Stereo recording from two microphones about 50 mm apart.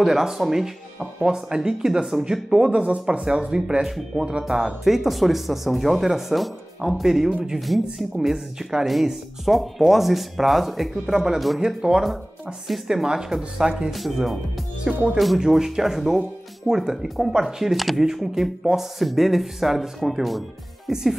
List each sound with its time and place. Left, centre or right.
0.0 s speech: centre
2.7 s speech: right
4.5 s speech: centre